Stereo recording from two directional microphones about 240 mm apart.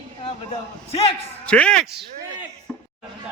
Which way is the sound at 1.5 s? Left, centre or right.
Centre.